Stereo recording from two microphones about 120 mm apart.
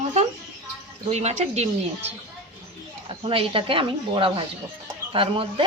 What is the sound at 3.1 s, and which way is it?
Speech, 50° right (ahead or behind).